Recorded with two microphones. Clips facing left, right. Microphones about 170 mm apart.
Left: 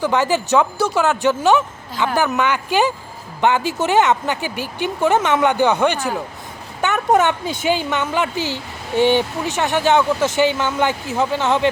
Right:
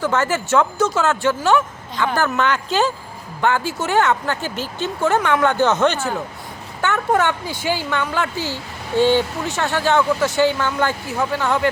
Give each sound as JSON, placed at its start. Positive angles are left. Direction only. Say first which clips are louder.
{"t": 0.0, "sound": "speech", "louder": "left 2 dB", "side_deg": 15}